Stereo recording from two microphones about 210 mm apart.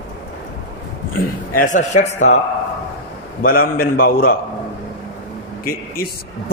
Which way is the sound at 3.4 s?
45° left (ahead or behind).